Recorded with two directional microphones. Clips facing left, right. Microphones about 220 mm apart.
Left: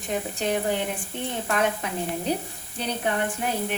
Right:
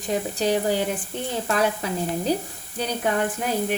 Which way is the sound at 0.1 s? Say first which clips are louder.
Right 4 dB; 35° right (ahead or behind).